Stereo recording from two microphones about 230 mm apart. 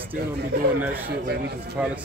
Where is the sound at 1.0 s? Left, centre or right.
Right.